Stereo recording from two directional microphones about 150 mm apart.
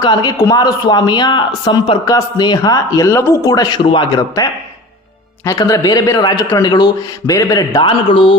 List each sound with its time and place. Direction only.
0.0 s speech: 30° left (ahead or behind)
5.5 s speech: 25° left (ahead or behind)